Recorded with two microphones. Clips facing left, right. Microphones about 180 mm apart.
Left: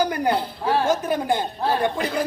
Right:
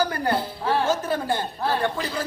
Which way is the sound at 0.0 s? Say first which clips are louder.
Left 2 dB; 15° left (ahead or behind).